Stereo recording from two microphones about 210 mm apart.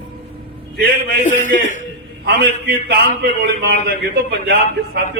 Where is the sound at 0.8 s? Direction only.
50° right (ahead or behind).